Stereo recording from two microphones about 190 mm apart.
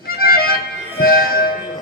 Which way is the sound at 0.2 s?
50° left (ahead or behind).